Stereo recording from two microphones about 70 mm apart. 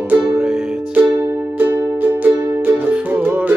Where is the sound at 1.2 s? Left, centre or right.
Right.